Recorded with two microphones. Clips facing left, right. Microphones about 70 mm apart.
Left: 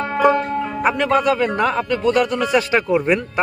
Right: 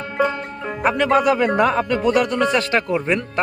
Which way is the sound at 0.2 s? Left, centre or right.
Left.